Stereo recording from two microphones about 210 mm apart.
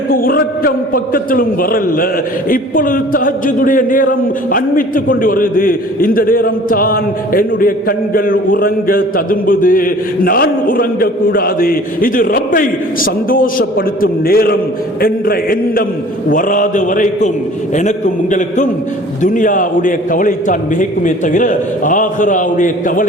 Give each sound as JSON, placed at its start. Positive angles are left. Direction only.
{"t": 0.1, "sound": "a man's voice", "side_deg": 45}